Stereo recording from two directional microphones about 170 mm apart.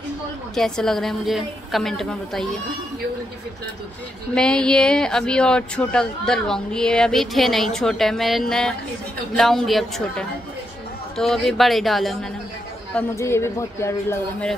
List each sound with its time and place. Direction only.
0.6 s speech: 5° left (ahead or behind)
4.4 s speech: 5° left (ahead or behind)
12.9 s a woman's voice: 15° left (ahead or behind)